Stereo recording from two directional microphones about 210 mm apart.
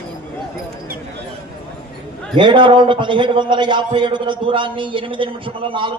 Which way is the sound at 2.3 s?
20° right (ahead or behind).